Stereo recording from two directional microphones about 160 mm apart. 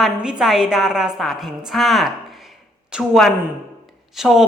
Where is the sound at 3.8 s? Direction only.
Centre (ahead or behind).